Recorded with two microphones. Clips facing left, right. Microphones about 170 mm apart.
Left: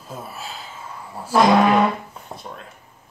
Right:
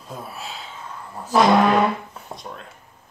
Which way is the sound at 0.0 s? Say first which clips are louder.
Even; centre (ahead or behind).